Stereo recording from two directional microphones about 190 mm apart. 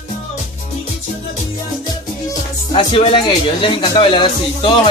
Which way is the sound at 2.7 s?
30° left (ahead or behind).